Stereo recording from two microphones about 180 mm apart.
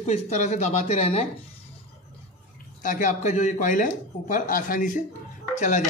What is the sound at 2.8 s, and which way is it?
A man's voice, 45° left (ahead or behind).